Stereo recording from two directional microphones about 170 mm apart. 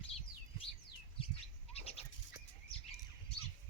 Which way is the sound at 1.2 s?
35° left (ahead or behind).